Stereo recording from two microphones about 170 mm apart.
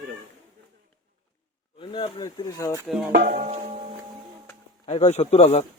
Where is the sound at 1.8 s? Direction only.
30° left (ahead or behind).